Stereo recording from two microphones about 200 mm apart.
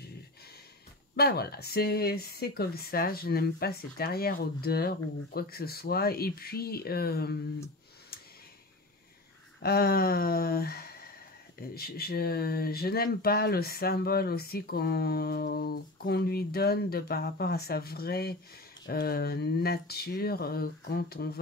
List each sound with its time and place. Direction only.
1.1 s speech: 50° left (ahead or behind)
9.6 s speech: 50° left (ahead or behind)